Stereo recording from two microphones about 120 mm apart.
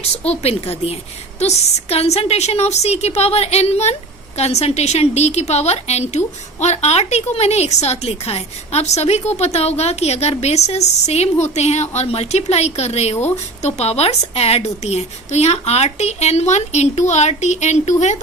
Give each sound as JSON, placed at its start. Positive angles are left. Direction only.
{"t": 0.2, "sound": "a woman's voice", "side_deg": 60}